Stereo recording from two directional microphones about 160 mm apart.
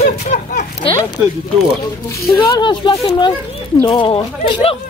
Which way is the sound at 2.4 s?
30° left (ahead or behind).